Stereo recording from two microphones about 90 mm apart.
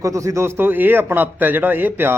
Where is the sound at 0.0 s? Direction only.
35° right (ahead or behind).